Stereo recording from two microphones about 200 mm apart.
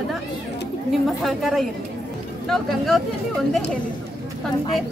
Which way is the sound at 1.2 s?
Centre (ahead or behind).